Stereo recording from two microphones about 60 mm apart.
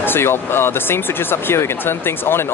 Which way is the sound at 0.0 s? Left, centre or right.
Left.